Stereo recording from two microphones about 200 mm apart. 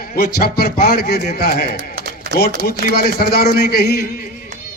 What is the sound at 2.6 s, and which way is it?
A man's voice, 50° left (ahead or behind).